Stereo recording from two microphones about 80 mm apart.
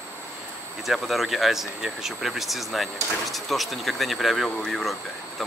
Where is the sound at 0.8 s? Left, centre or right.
Centre.